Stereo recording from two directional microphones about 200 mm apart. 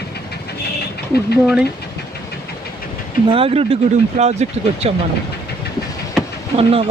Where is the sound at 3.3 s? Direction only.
25° right (ahead or behind).